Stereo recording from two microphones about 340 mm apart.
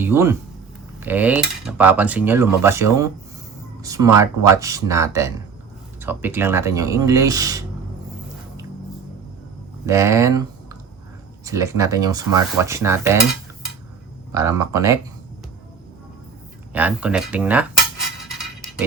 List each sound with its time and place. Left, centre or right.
0.0 s speech: centre
0.9 s cutlery: centre
9.8 s cutlery: centre
11.4 s cutlery: centre
14.3 s cutlery: centre
16.7 s cutlery: centre